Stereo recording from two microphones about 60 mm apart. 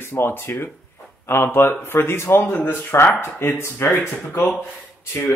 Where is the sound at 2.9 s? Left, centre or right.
Left.